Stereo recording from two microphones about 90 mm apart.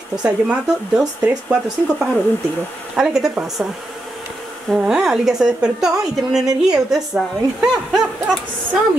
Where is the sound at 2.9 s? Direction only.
5° right (ahead or behind).